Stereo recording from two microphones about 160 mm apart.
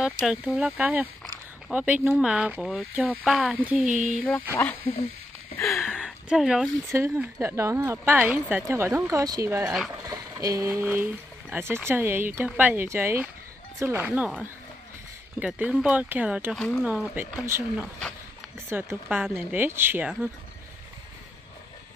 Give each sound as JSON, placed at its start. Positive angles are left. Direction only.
{"t": 0.2, "sound": "speech", "side_deg": -5}
{"t": 5.7, "sound": "speech", "side_deg": 0}
{"t": 6.9, "sound": "speech", "side_deg": -15}